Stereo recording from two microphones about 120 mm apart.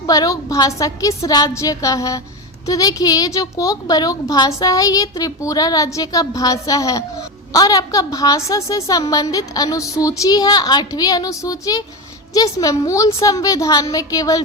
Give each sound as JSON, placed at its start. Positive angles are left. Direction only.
{"t": 0.0, "sound": "a woman's voice", "side_deg": 30}